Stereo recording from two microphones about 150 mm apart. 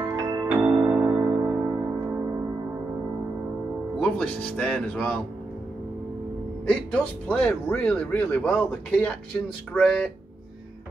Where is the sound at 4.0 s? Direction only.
5° left (ahead or behind).